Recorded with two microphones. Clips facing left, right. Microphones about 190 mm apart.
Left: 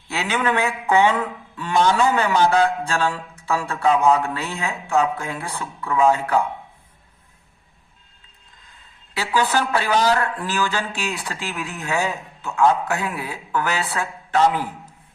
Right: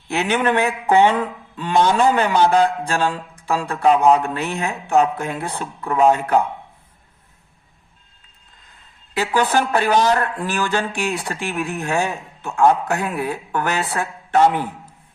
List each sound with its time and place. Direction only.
0.1 s a man's voice: 20° right (ahead or behind)
9.1 s a man's voice: 20° right (ahead or behind)
13.1 s speech: 60° right (ahead or behind)
13.7 s speech: 20° right (ahead or behind)